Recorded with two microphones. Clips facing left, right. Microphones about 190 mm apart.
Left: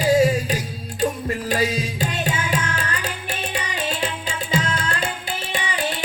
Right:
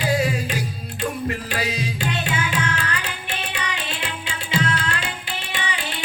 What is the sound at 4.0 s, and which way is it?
Music, 40° left (ahead or behind).